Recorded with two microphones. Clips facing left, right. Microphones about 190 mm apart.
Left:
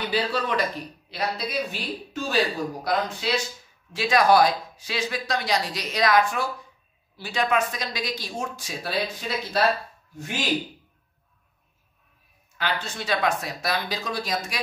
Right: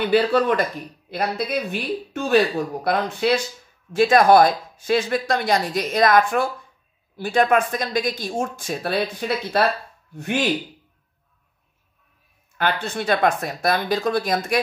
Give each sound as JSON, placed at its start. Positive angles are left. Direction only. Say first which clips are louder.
{"t": 0.1, "sound": "speech", "louder": "right 8 dB", "side_deg": -55}
{"t": 12.5, "sound": "speech", "louder": "right 6 dB", "side_deg": -55}